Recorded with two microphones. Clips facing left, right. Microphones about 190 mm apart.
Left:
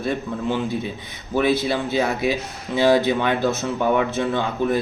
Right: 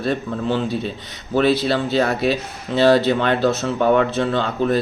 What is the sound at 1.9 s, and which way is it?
Speech, 65° right (ahead or behind).